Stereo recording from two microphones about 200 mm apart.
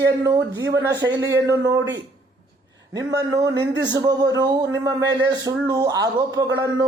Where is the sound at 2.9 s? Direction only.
15° right (ahead or behind).